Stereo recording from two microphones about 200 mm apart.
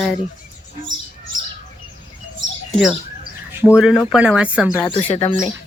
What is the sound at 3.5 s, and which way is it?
Speech, 5° right (ahead or behind).